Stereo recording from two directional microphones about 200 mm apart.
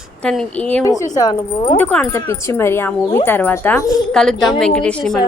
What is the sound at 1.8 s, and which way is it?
A woman's voice, 5° left (ahead or behind).